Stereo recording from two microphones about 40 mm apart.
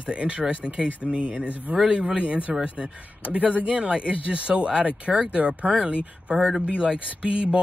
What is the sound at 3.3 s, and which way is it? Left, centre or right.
Speech, right.